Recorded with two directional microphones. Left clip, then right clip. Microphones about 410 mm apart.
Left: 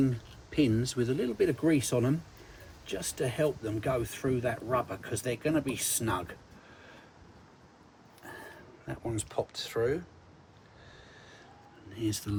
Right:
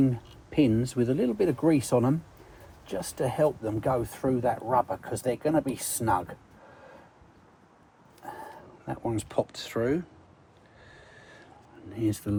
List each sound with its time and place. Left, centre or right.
0.0 s speech: centre
8.9 s speech: centre
11.9 s speech: centre